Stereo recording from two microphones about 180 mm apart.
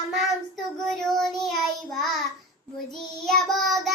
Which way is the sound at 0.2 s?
Centre (ahead or behind).